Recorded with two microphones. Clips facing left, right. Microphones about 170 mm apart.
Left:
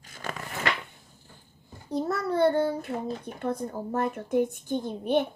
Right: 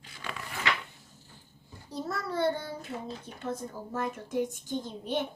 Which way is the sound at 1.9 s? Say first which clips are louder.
Left 7 dB; 60° left (ahead or behind).